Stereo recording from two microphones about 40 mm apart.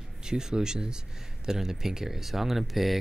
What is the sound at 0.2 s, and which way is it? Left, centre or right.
Speech, centre.